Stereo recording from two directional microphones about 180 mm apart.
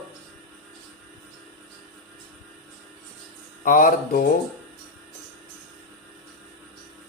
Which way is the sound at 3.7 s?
50° left (ahead or behind).